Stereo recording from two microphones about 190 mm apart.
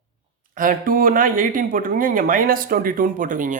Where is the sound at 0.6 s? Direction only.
45° right (ahead or behind).